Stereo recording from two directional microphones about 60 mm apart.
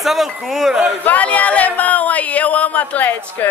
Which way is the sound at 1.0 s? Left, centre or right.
Left.